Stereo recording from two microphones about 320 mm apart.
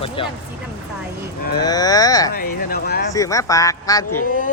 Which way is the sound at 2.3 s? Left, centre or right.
Left.